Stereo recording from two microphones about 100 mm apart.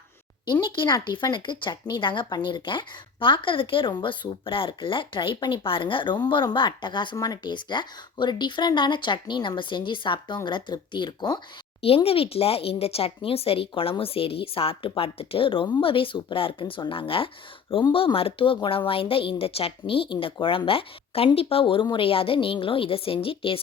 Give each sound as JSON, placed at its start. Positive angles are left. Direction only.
{"t": 0.6, "sound": "speech", "side_deg": 50}
{"t": 11.8, "sound": "speech", "side_deg": 75}